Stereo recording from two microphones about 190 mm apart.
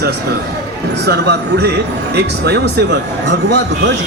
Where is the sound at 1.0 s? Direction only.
60° right (ahead or behind).